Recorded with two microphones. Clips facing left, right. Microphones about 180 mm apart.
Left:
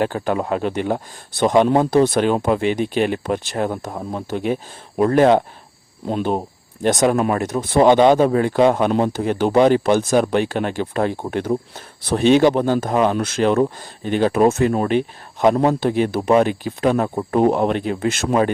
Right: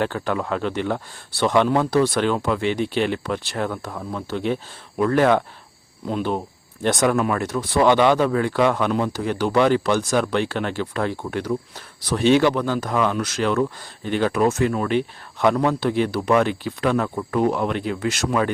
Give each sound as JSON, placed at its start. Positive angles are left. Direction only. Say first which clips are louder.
{"t": 0.0, "sound": "a man's voice", "louder": "left 3 dB", "side_deg": 15}
{"t": 4.9, "sound": "a man's voice", "louder": "left 4 dB", "side_deg": 25}
{"t": 12.6, "sound": "speech", "louder": "left 5 dB", "side_deg": 50}
{"t": 12.9, "sound": "a man's voice", "louder": "left 4 dB", "side_deg": 25}